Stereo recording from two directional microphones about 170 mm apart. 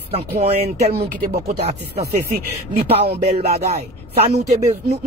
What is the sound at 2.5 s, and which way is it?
Speech, 40° right (ahead or behind).